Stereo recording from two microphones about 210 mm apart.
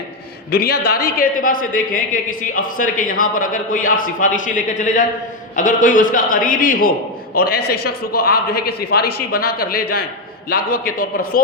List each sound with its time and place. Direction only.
0.5 s a man's voice: 45° left (ahead or behind)